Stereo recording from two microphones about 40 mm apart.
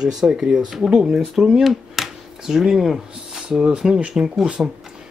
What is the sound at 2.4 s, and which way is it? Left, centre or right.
Speech, centre.